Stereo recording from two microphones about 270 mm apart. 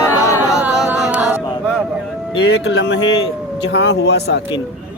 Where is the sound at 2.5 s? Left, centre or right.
Left.